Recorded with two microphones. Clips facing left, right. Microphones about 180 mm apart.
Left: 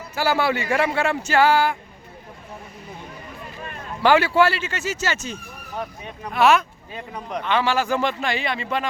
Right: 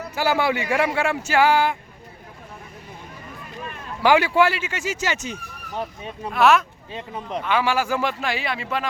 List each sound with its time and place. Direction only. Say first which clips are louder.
0.2 s speech: even; 15° right (ahead or behind)
4.0 s speech: even; 15° right (ahead or behind)
6.3 s speech: even; centre (ahead or behind)